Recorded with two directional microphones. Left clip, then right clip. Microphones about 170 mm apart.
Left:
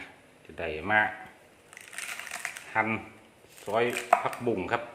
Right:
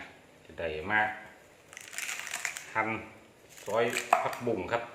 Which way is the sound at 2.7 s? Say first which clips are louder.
Left 4 dB; 75° left (ahead or behind).